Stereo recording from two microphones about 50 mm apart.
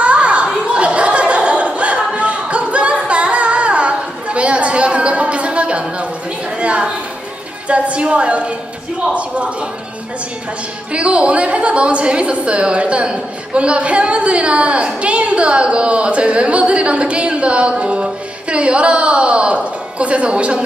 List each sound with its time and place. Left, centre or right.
0.0 s a sound: right
7.7 s a woman's voice: right
10.9 s a woman's voice: right